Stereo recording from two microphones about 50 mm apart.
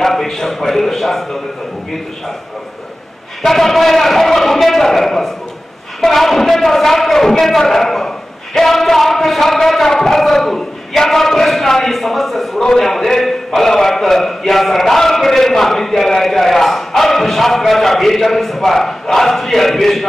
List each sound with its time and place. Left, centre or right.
0.0 s a man's voice: centre
3.4 s a man's voice: centre